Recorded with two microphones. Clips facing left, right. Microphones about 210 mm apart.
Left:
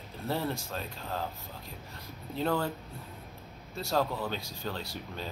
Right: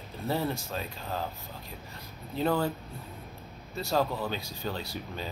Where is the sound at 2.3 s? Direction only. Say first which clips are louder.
Right 3 dB; 5° right (ahead or behind).